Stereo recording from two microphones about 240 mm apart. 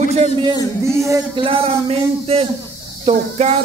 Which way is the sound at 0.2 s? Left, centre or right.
Centre.